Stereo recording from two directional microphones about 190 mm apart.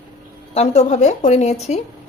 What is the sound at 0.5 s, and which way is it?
Speech, 35° left (ahead or behind).